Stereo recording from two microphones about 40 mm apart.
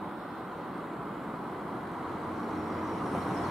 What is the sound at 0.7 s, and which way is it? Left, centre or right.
Vehicle, centre.